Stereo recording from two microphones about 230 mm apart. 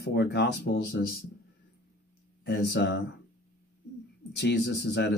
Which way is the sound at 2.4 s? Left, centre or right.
Left.